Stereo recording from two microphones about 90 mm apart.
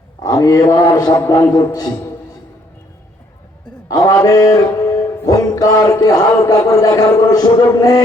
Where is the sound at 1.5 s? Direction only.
45° left (ahead or behind).